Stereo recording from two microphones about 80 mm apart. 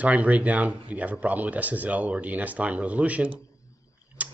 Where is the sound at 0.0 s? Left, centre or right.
Centre.